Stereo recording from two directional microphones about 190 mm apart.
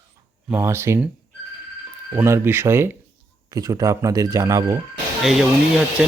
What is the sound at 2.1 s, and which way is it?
Speech, 15° right (ahead or behind).